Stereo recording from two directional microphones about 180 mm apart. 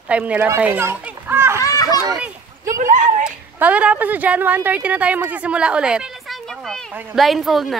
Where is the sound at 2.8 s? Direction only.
45° right (ahead or behind).